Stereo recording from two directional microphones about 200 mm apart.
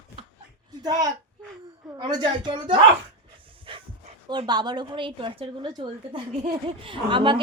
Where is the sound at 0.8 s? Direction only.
20° right (ahead or behind).